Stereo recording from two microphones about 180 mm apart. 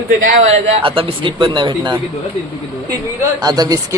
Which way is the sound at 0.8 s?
30° right (ahead or behind).